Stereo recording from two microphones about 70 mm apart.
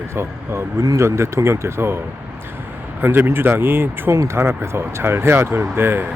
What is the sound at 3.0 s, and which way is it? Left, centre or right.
Speech, right.